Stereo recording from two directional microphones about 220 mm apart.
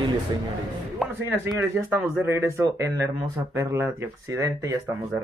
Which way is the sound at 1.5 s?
10° right (ahead or behind).